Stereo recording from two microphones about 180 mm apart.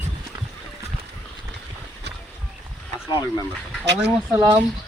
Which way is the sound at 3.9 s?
70° right (ahead or behind).